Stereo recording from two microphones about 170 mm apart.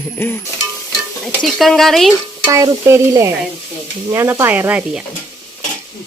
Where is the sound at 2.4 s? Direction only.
15° right (ahead or behind).